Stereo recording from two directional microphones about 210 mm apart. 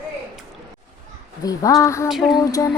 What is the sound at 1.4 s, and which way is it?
Speech, 15° left (ahead or behind).